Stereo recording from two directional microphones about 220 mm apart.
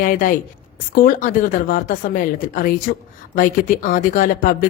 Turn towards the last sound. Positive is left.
turn(degrees=40)  # may be behind; listen again after turning